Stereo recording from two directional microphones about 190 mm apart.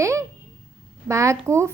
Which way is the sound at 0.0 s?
15° right (ahead or behind).